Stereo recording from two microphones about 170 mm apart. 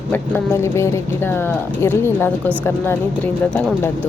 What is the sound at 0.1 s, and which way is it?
Speech, 15° left (ahead or behind).